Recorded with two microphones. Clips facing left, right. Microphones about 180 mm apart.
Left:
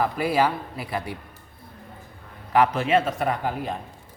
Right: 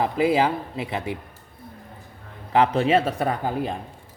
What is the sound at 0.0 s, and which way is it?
Speech, 20° right (ahead or behind).